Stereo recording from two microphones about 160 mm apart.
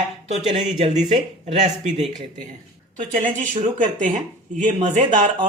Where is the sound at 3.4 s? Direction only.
50° right (ahead or behind).